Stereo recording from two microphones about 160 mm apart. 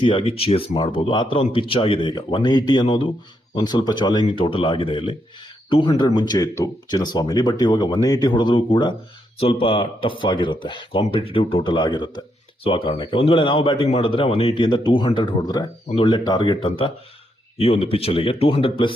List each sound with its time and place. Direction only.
0.0 s speech: 35° left (ahead or behind)